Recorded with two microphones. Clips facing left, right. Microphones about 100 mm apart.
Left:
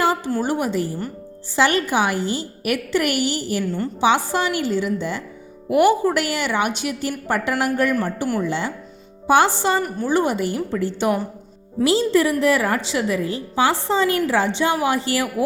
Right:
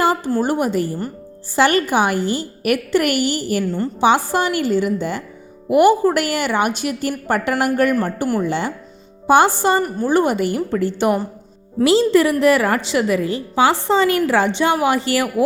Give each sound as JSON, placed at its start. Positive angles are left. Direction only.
{"t": 0.3, "sound": "a woman's voice", "side_deg": -45}
{"t": 3.6, "sound": "a woman's voice", "side_deg": -35}
{"t": 4.0, "sound": "a woman's voice", "side_deg": -50}
{"t": 11.8, "sound": "a woman's voice", "side_deg": -75}